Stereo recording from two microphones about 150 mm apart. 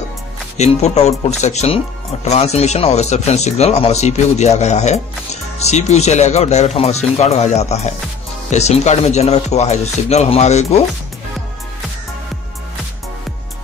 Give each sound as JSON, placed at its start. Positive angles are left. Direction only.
{"t": 0.6, "sound": "speech", "side_deg": 45}